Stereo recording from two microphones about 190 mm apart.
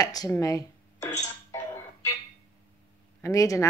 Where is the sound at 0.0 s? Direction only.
20° left (ahead or behind).